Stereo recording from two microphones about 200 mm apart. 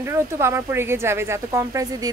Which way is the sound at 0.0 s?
15° right (ahead or behind).